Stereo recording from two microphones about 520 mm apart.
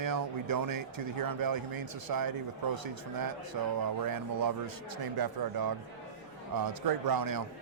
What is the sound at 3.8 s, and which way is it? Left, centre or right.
Speech, right.